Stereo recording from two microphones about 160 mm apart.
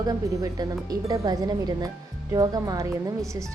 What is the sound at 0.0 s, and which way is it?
Speech, 25° right (ahead or behind).